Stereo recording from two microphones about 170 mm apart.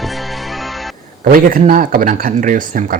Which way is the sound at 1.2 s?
55° right (ahead or behind).